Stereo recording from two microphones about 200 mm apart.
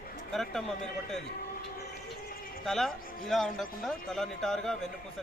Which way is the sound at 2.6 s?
Centre (ahead or behind).